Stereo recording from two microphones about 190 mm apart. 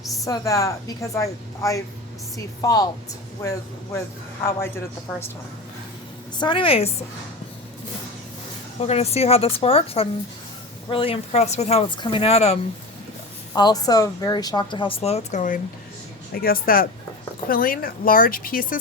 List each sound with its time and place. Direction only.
0.3 s a woman's voice: 15° left (ahead or behind)
4.4 s a woman's voice: 15° left (ahead or behind)
6.4 s speech: 25° left (ahead or behind)
8.8 s speech: 35° left (ahead or behind)
13.5 s speech: 20° left (ahead or behind); by 18.8 s 50° left (ahead or behind)